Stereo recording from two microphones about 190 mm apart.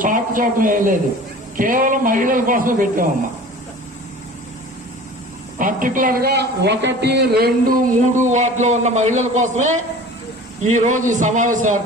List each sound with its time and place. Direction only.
0.0 s a man's voice: 45° right (ahead or behind)
5.6 s a man's voice: 45° right (ahead or behind)